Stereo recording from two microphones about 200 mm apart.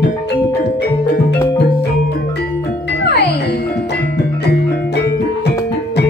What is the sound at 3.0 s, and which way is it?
Music, 55° left (ahead or behind).